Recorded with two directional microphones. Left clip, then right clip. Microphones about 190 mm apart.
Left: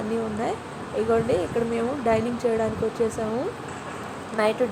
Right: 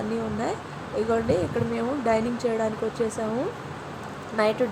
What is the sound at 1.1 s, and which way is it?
Speech, 5° right (ahead or behind).